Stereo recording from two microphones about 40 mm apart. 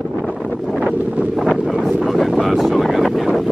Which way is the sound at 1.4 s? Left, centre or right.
Centre.